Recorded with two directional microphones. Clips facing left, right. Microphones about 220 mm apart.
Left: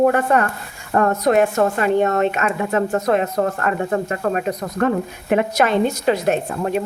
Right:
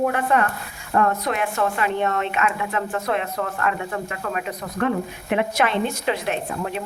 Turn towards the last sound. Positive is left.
turn(degrees=45)  # may be behind; listen again after turning